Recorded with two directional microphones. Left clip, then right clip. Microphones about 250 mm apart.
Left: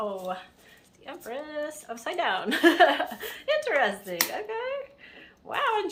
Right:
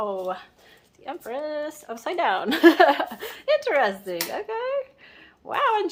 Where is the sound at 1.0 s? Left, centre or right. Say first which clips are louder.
Right 6 dB; right.